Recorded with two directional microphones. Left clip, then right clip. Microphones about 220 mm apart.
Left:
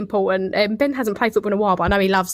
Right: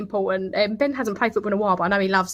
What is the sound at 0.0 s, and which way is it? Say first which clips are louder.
Speech: left 4 dB; 35° left (ahead or behind).